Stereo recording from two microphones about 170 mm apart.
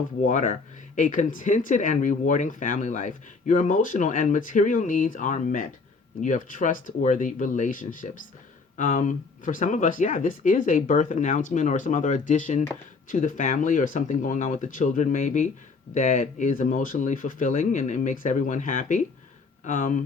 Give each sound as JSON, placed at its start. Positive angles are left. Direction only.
{"t": 0.2, "sound": "speech", "side_deg": 50}